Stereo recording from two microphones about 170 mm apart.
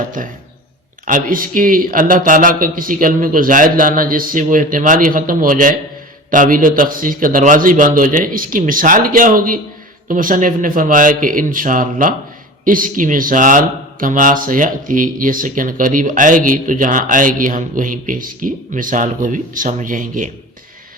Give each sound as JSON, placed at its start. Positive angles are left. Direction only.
{"t": 0.2, "sound": "speech", "side_deg": -50}